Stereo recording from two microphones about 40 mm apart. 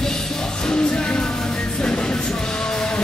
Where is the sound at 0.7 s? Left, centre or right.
Left.